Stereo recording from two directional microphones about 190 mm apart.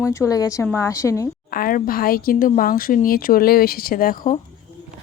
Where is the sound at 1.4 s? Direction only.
50° left (ahead or behind).